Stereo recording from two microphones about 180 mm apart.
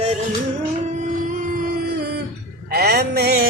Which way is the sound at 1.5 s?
55° right (ahead or behind).